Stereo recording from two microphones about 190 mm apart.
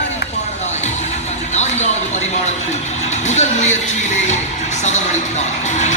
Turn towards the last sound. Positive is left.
turn(degrees=40)  # may be behind; listen again after turning